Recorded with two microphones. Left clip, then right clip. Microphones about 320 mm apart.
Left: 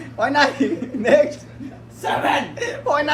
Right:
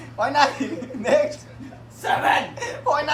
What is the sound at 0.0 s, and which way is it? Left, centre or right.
A woman's voice, centre.